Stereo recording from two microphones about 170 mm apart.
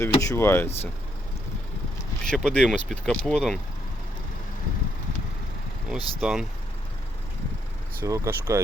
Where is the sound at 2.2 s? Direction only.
5° left (ahead or behind).